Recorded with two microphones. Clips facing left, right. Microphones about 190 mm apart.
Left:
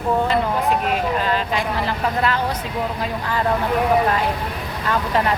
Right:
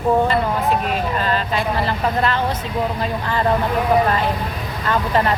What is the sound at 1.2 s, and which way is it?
Speech, 15° left (ahead or behind).